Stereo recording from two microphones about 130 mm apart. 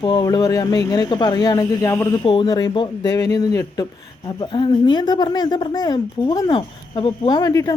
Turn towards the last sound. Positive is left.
turn(degrees=30)  # may be behind; listen again after turning